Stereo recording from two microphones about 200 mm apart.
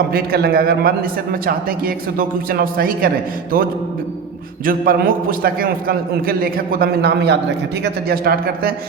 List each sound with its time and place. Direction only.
0.1 s a man's voice: 50° right (ahead or behind)
4.6 s a man's voice: 45° right (ahead or behind)